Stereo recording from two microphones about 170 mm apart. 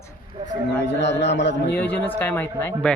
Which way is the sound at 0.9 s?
90° left.